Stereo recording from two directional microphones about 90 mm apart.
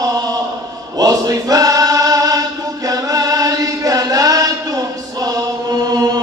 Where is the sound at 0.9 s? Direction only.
45° right (ahead or behind).